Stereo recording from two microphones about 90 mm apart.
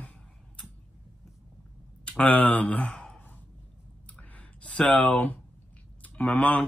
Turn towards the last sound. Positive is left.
turn(degrees=15)  # may be behind; listen again after turning